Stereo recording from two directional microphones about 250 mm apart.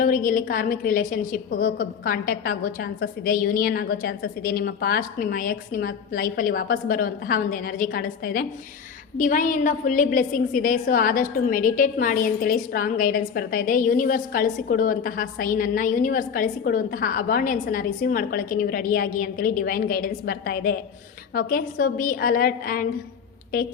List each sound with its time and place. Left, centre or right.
0.0 s a woman's voice: left